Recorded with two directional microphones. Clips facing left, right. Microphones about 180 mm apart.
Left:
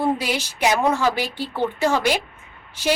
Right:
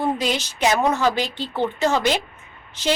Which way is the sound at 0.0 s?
10° left (ahead or behind).